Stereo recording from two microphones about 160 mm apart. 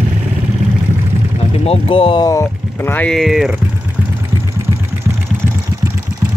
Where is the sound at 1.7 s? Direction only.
35° left (ahead or behind).